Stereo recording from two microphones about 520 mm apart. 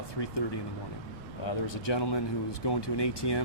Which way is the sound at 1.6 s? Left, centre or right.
Left.